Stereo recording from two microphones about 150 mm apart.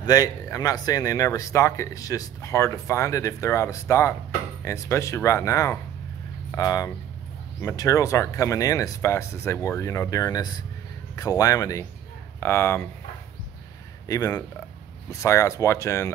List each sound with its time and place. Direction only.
0.0 s speech: 25° left (ahead or behind)
14.0 s speech: 20° left (ahead or behind)